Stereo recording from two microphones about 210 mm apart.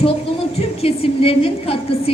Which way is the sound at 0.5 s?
30° left (ahead or behind).